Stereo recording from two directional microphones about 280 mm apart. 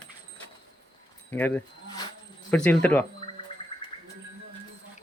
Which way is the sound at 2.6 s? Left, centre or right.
Centre.